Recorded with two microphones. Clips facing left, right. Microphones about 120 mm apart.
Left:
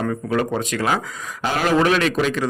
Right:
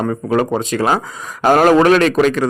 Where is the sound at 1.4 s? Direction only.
50° right (ahead or behind).